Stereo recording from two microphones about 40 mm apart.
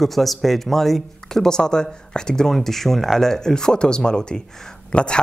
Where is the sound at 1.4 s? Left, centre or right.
Centre.